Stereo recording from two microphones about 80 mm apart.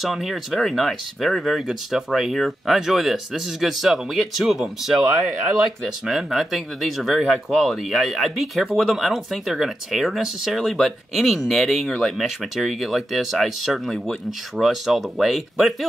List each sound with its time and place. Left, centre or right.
0.0 s speech: centre
6.0 s speech: centre